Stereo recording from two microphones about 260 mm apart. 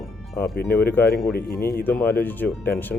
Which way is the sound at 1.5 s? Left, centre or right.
Left.